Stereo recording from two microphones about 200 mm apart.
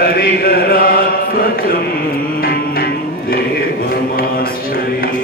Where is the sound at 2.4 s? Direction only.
50° left (ahead or behind).